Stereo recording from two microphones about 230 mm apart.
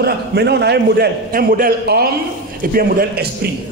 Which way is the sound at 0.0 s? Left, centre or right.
Right.